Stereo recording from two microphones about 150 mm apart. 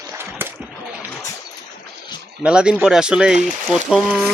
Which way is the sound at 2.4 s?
5° right (ahead or behind).